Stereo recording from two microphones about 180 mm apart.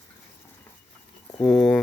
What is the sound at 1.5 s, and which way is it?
Speech, 5° left (ahead or behind).